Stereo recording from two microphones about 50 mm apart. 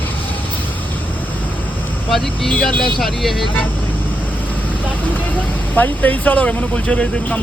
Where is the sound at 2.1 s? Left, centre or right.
Centre.